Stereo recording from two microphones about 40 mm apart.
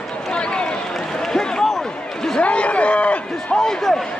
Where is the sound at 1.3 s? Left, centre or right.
Centre.